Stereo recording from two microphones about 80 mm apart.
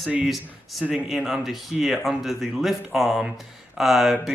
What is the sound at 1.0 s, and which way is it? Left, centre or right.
A man's voice, centre.